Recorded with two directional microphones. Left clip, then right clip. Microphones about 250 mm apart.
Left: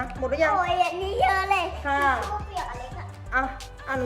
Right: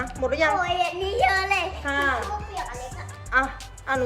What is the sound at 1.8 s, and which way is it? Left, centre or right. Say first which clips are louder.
Music: left 1 dB; centre.